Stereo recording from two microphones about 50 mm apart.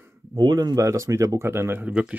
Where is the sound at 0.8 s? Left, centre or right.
Right.